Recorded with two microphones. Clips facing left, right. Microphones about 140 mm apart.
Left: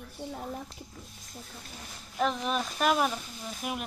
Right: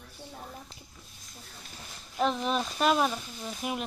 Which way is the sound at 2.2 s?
Centre (ahead or behind).